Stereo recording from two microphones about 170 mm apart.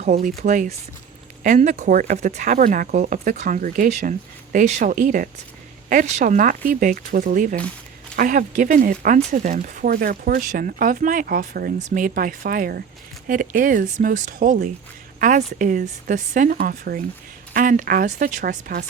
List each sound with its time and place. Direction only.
0.0 s speech: 50° right (ahead or behind)